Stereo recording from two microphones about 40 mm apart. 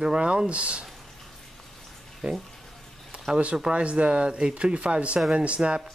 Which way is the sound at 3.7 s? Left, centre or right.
Right.